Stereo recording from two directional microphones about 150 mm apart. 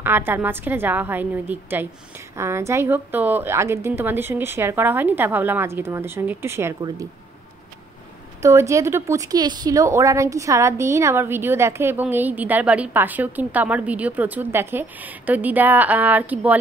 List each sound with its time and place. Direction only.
0.0 s a woman's voice: 15° right (ahead or behind)
8.4 s a woman's voice: 20° right (ahead or behind)